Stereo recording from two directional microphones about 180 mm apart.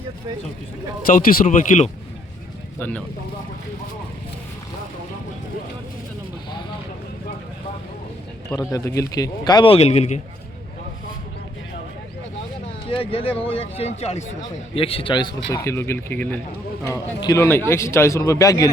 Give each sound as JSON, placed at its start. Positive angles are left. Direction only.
{"t": 1.0, "sound": "speech", "side_deg": 50}
{"t": 2.7, "sound": "speech", "side_deg": 10}
{"t": 8.4, "sound": "speech", "side_deg": 20}
{"t": 12.9, "sound": "speech", "side_deg": 30}
{"t": 15.5, "sound": "a man's voice", "side_deg": 15}